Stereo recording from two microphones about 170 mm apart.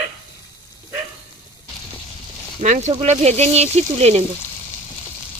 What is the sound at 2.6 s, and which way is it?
Speech, 45° right (ahead or behind).